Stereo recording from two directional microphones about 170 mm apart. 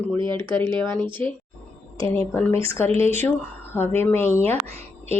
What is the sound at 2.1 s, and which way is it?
Speech, 15° left (ahead or behind).